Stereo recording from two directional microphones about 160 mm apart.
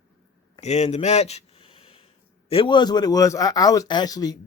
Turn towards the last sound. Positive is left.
turn(degrees=25)  # may be behind; listen again after turning